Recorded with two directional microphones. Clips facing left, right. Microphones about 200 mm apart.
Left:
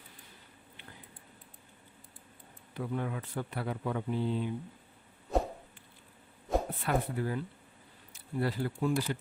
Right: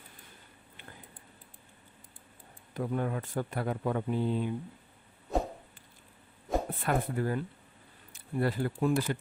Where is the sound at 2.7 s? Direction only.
45° right (ahead or behind).